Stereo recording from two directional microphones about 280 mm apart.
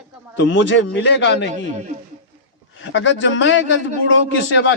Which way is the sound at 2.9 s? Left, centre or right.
Left.